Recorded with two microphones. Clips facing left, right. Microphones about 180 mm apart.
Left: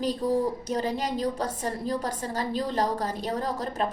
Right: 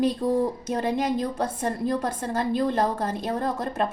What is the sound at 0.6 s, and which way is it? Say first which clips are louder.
A woman's voice: right 3 dB; 55° right (ahead or behind).